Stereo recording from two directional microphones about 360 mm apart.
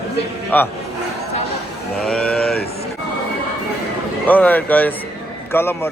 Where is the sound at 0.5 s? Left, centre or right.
Centre.